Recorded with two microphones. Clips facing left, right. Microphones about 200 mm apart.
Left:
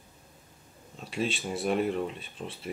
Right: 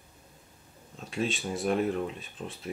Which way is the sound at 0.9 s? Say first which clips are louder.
Even; centre (ahead or behind).